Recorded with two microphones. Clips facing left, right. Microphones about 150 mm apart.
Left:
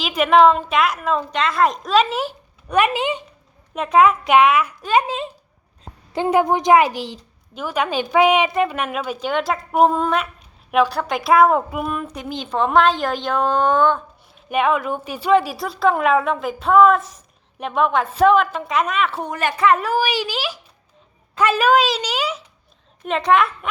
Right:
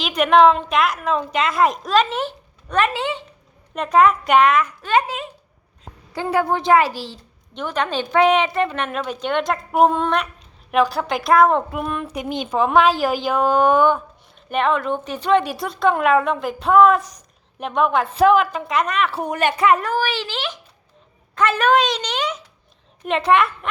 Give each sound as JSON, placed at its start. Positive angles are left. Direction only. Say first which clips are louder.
{"t": 0.0, "sound": "a woman's voice", "louder": "even", "side_deg": 0}
{"t": 3.8, "sound": "a woman's voice", "louder": "left 1 dB", "side_deg": 0}
{"t": 12.1, "sound": "a woman's voice", "louder": "right 3 dB", "side_deg": -15}
{"t": 12.5, "sound": "a woman's voice", "louder": "even", "side_deg": -5}
{"t": 14.3, "sound": "a woman's voice", "louder": "left 1 dB", "side_deg": 5}
{"t": 19.3, "sound": "speech", "louder": "right 1 dB", "side_deg": -20}
{"t": 19.8, "sound": "a woman's voice", "louder": "left 2 dB", "side_deg": 10}
{"t": 21.6, "sound": "a woman's voice", "louder": "even", "side_deg": 5}